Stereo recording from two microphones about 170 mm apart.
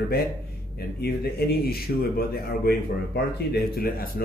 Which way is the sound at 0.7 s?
70° left (ahead or behind).